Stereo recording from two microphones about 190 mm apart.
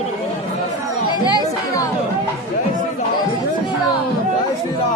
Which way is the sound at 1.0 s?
20° left (ahead or behind).